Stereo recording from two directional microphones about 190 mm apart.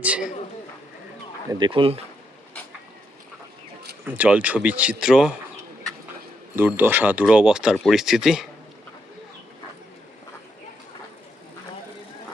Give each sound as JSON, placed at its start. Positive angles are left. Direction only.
{"t": 1.5, "sound": "speech", "side_deg": -25}
{"t": 4.2, "sound": "speech", "side_deg": -5}
{"t": 6.6, "sound": "speech", "side_deg": -10}